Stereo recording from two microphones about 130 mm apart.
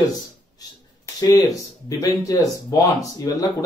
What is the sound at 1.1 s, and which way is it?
Speech, 30° left (ahead or behind).